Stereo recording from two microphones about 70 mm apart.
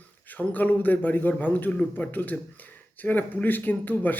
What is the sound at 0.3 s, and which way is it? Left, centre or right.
Speech, left.